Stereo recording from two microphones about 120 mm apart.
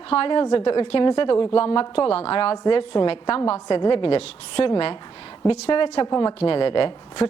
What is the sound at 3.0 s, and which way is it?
Speech, 45° left (ahead or behind).